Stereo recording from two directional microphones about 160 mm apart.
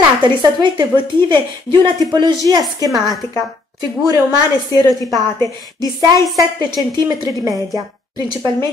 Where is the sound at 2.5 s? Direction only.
25° right (ahead or behind).